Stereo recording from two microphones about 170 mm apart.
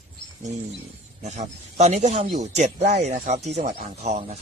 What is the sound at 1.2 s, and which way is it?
Speech, 45° right (ahead or behind).